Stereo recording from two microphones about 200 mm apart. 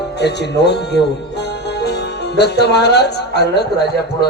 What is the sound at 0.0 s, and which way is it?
A man's voice, 55° left (ahead or behind).